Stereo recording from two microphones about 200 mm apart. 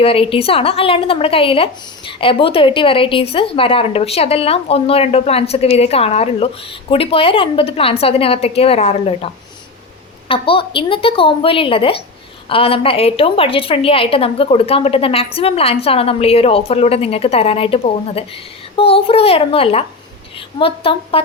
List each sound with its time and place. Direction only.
0.0 s a woman's voice: 30° left (ahead or behind)